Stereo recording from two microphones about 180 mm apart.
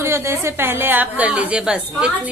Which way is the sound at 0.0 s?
15° right (ahead or behind).